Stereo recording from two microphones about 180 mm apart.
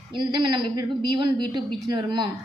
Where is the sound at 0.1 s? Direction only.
25° right (ahead or behind).